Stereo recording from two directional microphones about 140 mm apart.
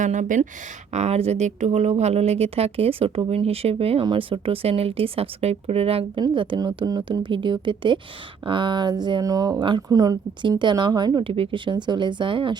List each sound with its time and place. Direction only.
0.0 s speech: 65° right (ahead or behind)
0.9 s speech: 50° right (ahead or behind)